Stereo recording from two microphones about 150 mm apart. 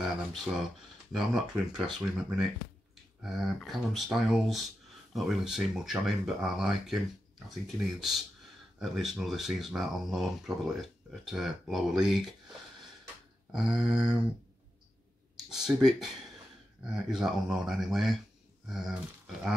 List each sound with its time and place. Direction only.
0.0 s a sound: centre (ahead or behind)
1.1 s speech: 5° right (ahead or behind)
3.2 s speech: centre (ahead or behind)
13.5 s speech: 5° right (ahead or behind)
15.5 s speech: 5° right (ahead or behind)